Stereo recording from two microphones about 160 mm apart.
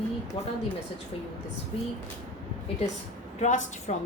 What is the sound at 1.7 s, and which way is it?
Speech, 35° left (ahead or behind).